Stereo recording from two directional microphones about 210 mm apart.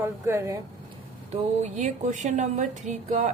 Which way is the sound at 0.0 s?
10° right (ahead or behind).